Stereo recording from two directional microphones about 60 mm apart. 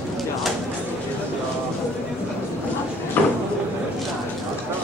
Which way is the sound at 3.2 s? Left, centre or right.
Left.